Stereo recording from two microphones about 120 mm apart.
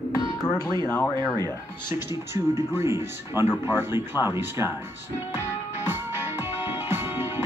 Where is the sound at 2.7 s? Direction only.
20° right (ahead or behind).